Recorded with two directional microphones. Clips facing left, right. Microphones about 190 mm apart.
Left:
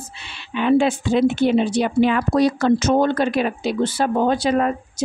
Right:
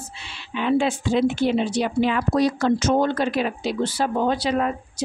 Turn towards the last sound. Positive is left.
turn(degrees=45)  # may be behind; listen again after turning